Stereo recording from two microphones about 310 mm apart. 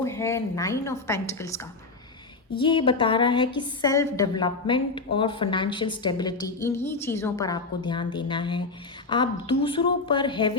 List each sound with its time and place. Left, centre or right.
0.0 s a woman's voice: centre